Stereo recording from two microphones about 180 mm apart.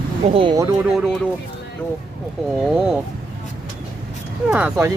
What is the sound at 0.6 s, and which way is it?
Speech, 15° right (ahead or behind).